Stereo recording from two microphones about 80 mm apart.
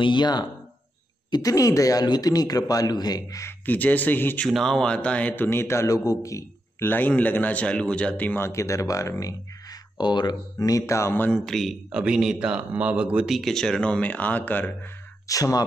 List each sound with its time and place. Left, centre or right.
0.0 s speech: left
1.3 s a man's voice: left
2.0 s a man's voice: left
3.4 s a man's voice: left
4.5 s speech: centre; by 6.4 s left
6.8 s a man's voice: left
8.4 s speech: left
9.2 s speech: left
11.3 s a man's voice: centre
11.9 s speech: centre
13.3 s speech: centre; by 14.7 s left
15.2 s a man's voice: left